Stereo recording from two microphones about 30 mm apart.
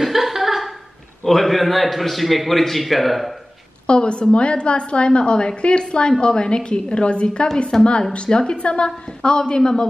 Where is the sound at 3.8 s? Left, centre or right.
Left.